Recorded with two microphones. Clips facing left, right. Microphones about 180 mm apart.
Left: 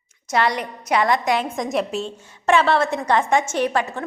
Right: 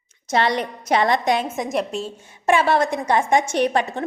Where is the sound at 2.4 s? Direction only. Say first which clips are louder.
Even; 10° right (ahead or behind).